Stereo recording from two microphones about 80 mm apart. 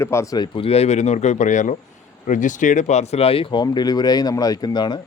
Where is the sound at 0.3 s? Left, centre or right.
Left.